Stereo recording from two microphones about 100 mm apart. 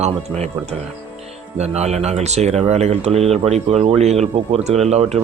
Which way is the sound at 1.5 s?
90° right.